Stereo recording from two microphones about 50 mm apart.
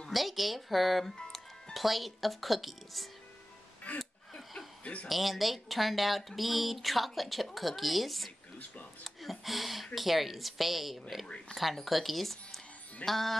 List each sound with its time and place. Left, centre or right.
0.1 s speech: centre
3.9 s speech: left
5.0 s speech: centre
9.0 s a sound: centre
9.9 s speech: centre
11.2 s speech: centre
11.5 s speech: centre